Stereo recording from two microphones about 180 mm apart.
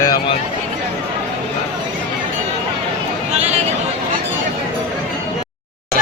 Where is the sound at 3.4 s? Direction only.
40° right (ahead or behind).